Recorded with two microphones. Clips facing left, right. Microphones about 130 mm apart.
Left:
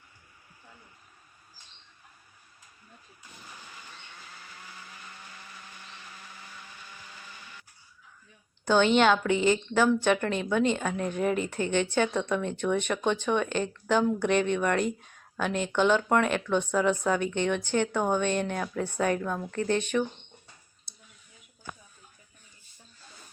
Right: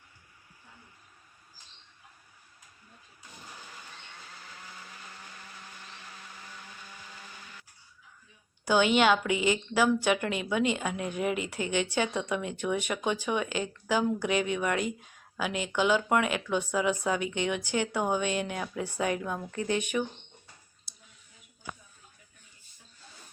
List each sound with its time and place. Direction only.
8.6 s speech: 10° right (ahead or behind)